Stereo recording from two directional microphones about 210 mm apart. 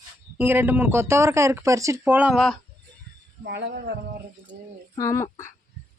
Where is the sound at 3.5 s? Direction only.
55° right (ahead or behind).